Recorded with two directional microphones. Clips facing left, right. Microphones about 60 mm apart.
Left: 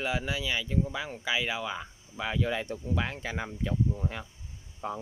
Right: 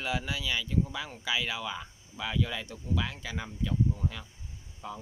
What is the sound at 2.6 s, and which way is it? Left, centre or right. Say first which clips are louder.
Speech: left 2 dB; left.